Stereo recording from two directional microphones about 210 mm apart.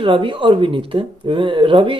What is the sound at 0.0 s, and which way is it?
Speech, 25° right (ahead or behind).